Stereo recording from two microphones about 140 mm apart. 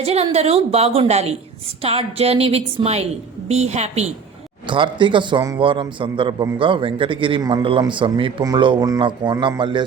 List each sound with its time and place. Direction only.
0.0 s a woman's voice: 50° right (ahead or behind)
4.7 s a man's voice: 35° right (ahead or behind)